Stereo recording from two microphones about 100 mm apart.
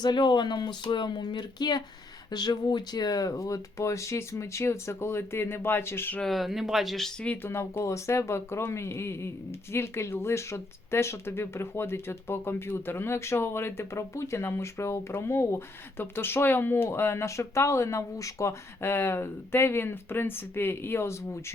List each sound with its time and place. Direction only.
0.0 s speech: 50° left (ahead or behind); by 6.1 s 25° left (ahead or behind)
6.1 s speech: centre (ahead or behind)
7.4 s speech: 25° left (ahead or behind)